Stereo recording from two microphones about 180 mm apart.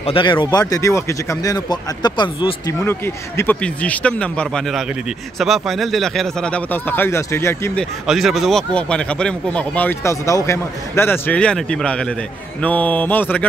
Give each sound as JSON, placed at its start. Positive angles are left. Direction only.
{"t": 0.0, "sound": "speech", "side_deg": 30}
{"t": 2.8, "sound": "speech", "side_deg": 15}
{"t": 8.1, "sound": "speech", "side_deg": 0}